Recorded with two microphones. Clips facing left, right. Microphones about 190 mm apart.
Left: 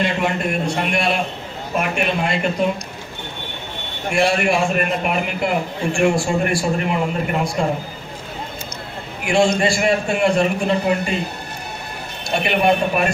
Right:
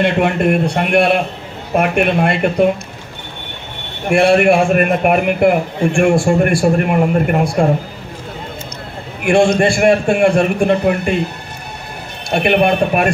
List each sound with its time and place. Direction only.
0.0 s a man's voice: 55° right (ahead or behind)
4.1 s a man's voice: 55° right (ahead or behind)
9.2 s a man's voice: 55° right (ahead or behind)
12.3 s a man's voice: 55° right (ahead or behind)